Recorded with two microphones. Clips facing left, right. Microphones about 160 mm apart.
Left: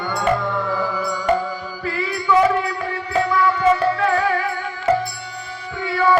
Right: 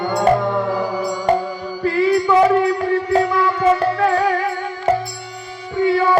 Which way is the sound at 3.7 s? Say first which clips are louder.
Right 2 dB; 35° right (ahead or behind).